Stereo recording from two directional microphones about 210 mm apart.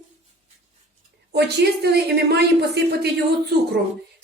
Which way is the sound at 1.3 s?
50° right (ahead or behind).